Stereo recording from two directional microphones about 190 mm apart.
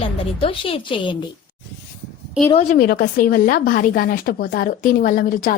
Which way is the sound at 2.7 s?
55° left (ahead or behind).